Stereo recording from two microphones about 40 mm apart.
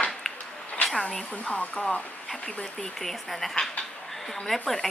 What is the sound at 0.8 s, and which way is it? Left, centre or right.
Speech, left.